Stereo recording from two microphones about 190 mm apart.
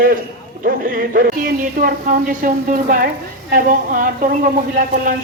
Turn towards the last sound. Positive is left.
turn(degrees=-45)  # may be behind; listen again after turning